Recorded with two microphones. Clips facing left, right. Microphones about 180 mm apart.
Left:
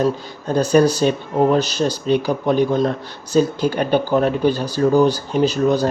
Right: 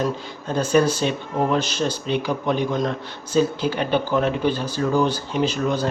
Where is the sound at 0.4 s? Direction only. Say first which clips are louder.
Left 4 dB; 40° left (ahead or behind).